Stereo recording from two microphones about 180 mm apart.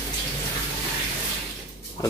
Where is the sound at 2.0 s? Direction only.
20° left (ahead or behind).